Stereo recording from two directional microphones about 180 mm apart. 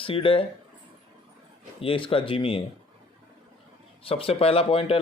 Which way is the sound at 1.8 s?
30° left (ahead or behind).